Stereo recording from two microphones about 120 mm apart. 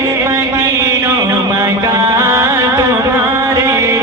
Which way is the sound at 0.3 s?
25° right (ahead or behind).